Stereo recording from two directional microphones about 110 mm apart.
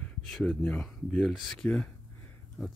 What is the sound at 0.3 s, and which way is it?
Speech, 5° left (ahead or behind).